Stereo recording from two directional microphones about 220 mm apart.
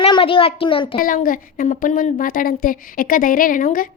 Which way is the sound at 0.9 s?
40° left (ahead or behind).